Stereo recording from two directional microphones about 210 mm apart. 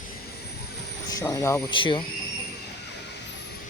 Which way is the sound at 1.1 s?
15° left (ahead or behind).